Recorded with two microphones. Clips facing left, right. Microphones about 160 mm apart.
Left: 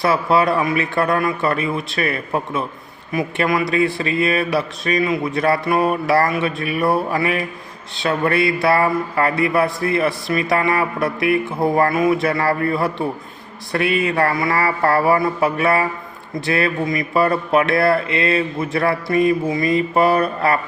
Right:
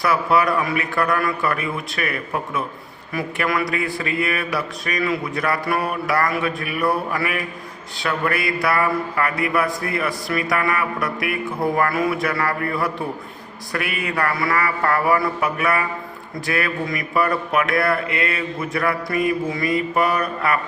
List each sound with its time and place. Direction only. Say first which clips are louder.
0.0 s speech: left 2 dB; 25° left (ahead or behind)